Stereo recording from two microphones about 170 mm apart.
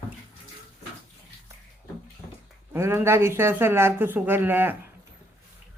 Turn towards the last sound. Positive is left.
turn(degrees=-10)  # may be behind; listen again after turning